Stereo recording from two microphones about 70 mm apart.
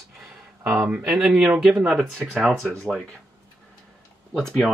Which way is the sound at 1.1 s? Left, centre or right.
Centre.